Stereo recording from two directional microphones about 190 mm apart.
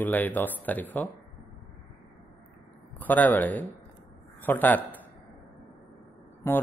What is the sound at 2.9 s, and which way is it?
Speech, 10° left (ahead or behind).